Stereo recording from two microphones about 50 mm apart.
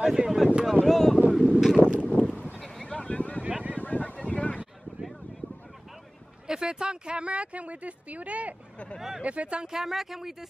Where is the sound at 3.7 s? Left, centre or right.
Left.